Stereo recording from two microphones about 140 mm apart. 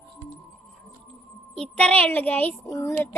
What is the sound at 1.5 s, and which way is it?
Speech, 5° left (ahead or behind).